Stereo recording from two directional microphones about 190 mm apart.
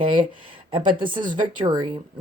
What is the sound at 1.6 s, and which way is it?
Speech, 20° right (ahead or behind).